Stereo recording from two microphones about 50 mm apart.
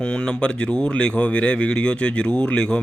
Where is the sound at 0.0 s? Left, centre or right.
Centre.